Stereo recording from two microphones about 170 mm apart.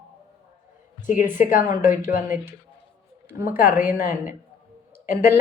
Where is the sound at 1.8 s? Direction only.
50° left (ahead or behind).